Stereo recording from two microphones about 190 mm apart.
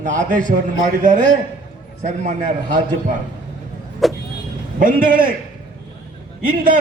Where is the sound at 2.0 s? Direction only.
40° right (ahead or behind).